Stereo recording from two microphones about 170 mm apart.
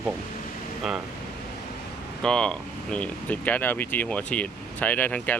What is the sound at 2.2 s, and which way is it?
Speech, 5° left (ahead or behind).